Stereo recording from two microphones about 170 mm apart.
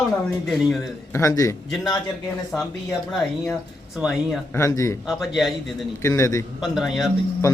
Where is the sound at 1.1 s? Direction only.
20° left (ahead or behind).